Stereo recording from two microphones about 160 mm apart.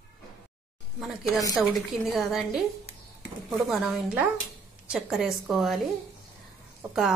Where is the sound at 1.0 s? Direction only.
Centre (ahead or behind).